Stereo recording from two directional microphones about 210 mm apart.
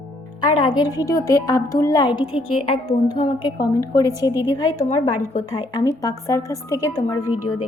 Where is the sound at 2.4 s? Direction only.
90° left.